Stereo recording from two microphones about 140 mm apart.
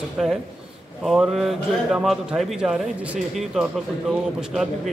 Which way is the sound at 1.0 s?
Centre (ahead or behind).